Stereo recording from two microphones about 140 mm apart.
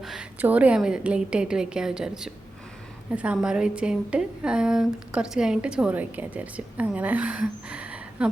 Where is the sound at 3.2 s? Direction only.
5° right (ahead or behind).